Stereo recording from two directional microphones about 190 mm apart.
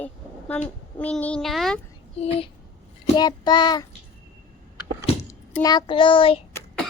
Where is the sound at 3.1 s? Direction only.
20° left (ahead or behind).